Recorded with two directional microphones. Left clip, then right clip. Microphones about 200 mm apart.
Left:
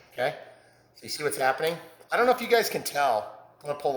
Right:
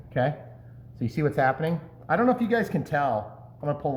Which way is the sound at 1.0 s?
20° left (ahead or behind).